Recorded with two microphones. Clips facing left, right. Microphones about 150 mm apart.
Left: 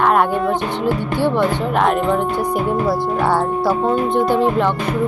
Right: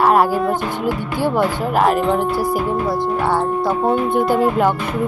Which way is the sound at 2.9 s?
15° right (ahead or behind).